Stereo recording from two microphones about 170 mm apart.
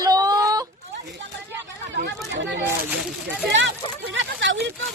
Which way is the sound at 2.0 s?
90° right.